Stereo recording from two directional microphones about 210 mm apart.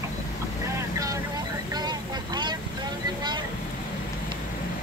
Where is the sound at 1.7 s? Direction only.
20° right (ahead or behind).